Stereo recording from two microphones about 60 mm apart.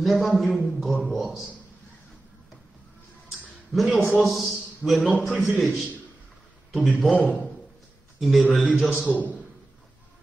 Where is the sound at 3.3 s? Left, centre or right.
Centre.